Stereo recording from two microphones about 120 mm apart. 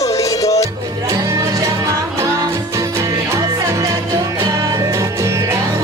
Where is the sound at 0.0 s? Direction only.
30° left (ahead or behind).